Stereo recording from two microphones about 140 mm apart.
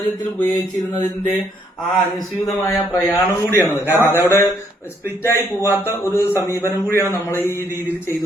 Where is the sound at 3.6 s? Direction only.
15° right (ahead or behind).